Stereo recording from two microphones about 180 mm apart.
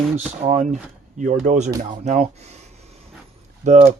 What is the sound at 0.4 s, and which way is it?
Speech, 35° right (ahead or behind).